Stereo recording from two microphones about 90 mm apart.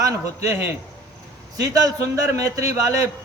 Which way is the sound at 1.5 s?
45° right (ahead or behind).